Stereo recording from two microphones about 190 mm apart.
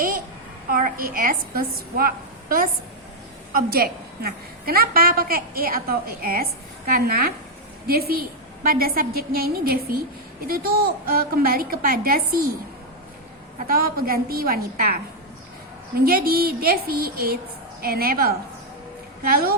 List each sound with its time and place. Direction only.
0.7 s a woman's voice: 45° right (ahead or behind)
13.7 s a woman's voice: 50° right (ahead or behind)
16.0 s a woman's voice: 50° right (ahead or behind)